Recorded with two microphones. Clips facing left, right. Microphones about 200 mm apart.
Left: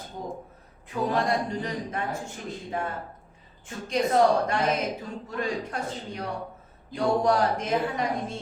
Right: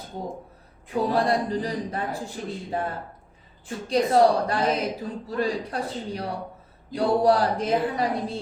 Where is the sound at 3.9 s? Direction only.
35° right (ahead or behind).